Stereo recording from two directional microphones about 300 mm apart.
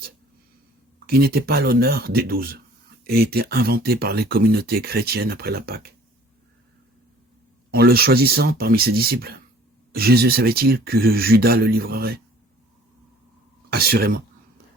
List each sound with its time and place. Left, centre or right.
0.9 s speech: right
7.7 s speech: right
13.7 s speech: right